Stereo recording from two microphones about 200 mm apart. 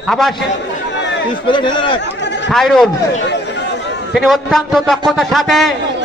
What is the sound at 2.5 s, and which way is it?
Speech, centre (ahead or behind).